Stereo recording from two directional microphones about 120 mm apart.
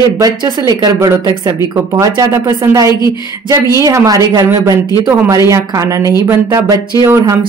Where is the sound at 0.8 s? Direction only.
25° right (ahead or behind).